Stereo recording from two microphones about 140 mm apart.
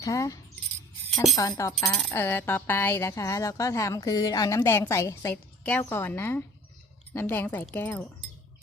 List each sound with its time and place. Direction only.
0.0 s speech: 25° left (ahead or behind)
1.1 s speech: centre (ahead or behind)
1.4 s speech: 25° left (ahead or behind)